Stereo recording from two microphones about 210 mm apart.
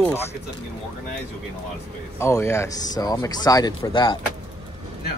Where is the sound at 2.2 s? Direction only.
15° left (ahead or behind).